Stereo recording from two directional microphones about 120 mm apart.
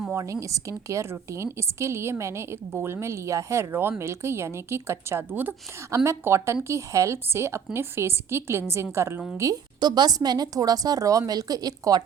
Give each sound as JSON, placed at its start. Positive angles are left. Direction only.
{"t": 0.1, "sound": "a woman's voice", "side_deg": -25}